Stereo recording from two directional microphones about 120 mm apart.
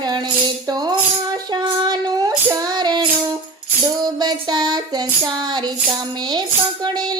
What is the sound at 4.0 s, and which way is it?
Child singing, 35° right (ahead or behind).